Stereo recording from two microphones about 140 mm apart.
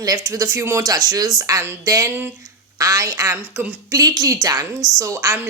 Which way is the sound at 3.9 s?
25° right (ahead or behind).